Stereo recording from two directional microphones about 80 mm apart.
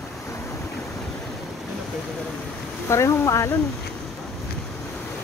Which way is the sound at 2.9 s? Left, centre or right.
Left.